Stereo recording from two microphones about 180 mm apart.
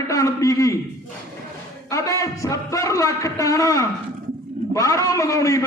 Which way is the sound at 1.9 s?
15° left (ahead or behind).